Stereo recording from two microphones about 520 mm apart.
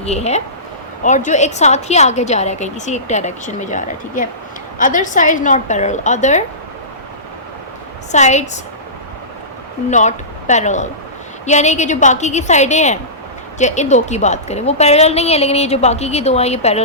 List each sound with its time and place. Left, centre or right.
0.0 s a woman's voice: centre
8.1 s a woman's voice: centre
9.9 s a woman's voice: centre